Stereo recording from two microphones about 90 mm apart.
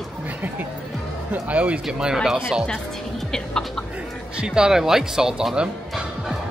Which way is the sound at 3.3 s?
5° left (ahead or behind).